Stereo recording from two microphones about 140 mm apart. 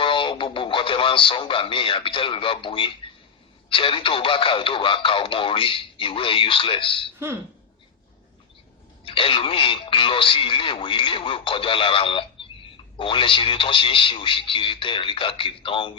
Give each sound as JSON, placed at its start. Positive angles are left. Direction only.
{"t": 0.0, "sound": "radio", "side_deg": 35}
{"t": 3.7, "sound": "speech", "side_deg": 40}
{"t": 9.0, "sound": "speech", "side_deg": 40}